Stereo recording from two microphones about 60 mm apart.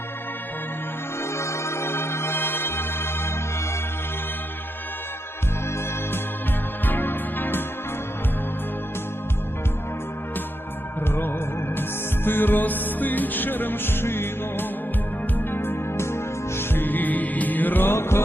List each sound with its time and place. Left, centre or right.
1.2 s music: left
6.8 s music: left
11.0 s music: left